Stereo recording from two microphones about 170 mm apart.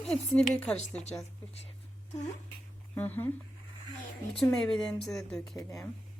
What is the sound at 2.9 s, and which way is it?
Speech, 10° left (ahead or behind).